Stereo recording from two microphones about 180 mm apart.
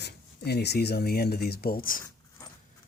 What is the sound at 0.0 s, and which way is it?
Speech, 65° left (ahead or behind).